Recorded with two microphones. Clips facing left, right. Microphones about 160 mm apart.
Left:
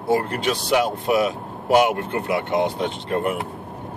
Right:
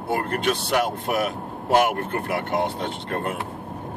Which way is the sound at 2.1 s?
15° left (ahead or behind).